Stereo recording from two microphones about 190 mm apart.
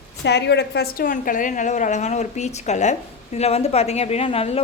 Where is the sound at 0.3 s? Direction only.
60° left (ahead or behind).